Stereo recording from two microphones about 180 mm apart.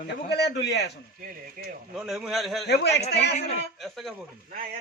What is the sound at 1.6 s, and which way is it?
Speech, 50° right (ahead or behind).